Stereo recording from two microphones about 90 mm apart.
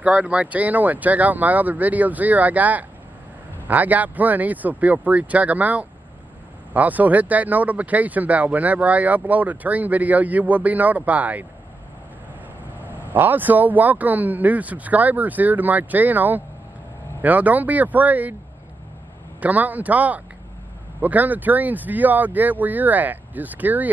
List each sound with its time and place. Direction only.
0.0 s speech: 15° right (ahead or behind)
13.1 s speech: 20° right (ahead or behind)
19.4 s speech: 15° right (ahead or behind)